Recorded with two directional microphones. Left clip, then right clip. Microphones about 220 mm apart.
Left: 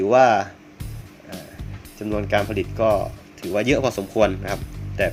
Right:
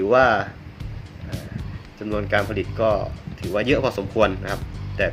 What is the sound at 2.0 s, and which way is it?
Speech, 15° left (ahead or behind).